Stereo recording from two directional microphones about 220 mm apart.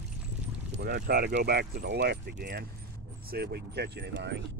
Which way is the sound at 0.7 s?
50° right (ahead or behind).